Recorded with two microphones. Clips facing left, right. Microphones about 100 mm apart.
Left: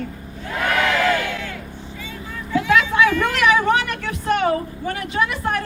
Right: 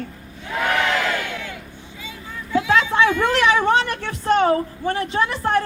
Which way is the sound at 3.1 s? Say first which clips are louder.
Even; 25° right (ahead or behind).